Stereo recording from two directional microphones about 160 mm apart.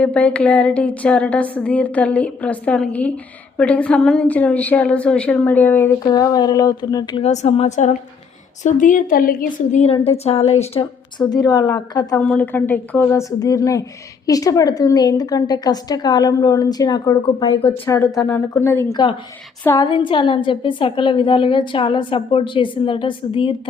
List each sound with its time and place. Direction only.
0.0 s a woman's voice: 10° left (ahead or behind)
6.0 s a woman's voice: 25° left (ahead or behind)
7.2 s a woman's voice: 45° left (ahead or behind)
8.6 s a woman's voice: 55° left (ahead or behind)
9.8 s a woman's voice: 35° left (ahead or behind)
11.3 s a woman's voice: 25° left (ahead or behind)
12.3 s a woman's voice: 10° left (ahead or behind)
17.4 s a woman's voice: 35° left (ahead or behind)
17.8 s a woman's voice: 20° left (ahead or behind)
19.9 s a woman's voice: 30° left (ahead or behind)